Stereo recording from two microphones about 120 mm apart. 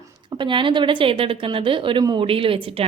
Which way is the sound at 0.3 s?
45° right (ahead or behind).